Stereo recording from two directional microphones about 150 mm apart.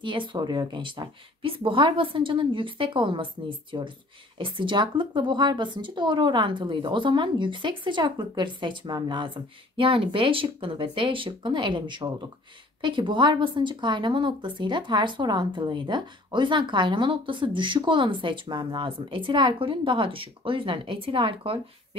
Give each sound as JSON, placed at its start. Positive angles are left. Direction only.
{"t": 0.0, "sound": "a woman's voice", "side_deg": -35}